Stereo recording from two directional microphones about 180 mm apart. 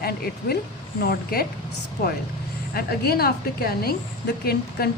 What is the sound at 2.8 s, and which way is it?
Speech, 60° left (ahead or behind).